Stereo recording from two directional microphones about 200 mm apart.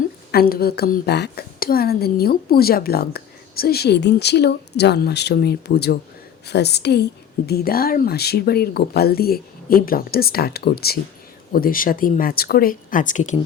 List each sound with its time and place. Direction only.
0.3 s a woman's voice: 50° left (ahead or behind)